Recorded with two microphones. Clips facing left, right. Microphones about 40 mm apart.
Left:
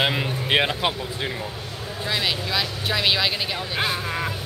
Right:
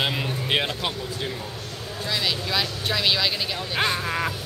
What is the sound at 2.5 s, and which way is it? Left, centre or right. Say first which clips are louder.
Speech: left 1 dB; centre.